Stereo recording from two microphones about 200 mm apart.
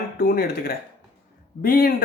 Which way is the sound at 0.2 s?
50° left (ahead or behind).